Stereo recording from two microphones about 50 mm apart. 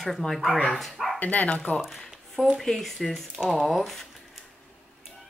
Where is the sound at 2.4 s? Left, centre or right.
Right.